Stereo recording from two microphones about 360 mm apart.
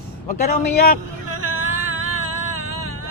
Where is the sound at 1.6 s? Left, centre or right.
Right.